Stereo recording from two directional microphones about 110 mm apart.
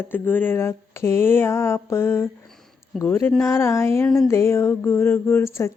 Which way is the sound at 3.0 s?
15° left (ahead or behind).